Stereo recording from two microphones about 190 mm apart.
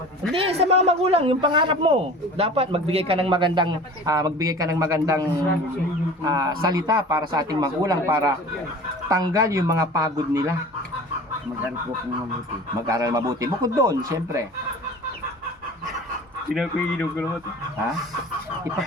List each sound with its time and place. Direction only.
0.3 s a man's voice: 30° right (ahead or behind); by 10.5 s 15° right (ahead or behind)
12.9 s speech: 15° right (ahead or behind)
16.6 s speech: 5° left (ahead or behind)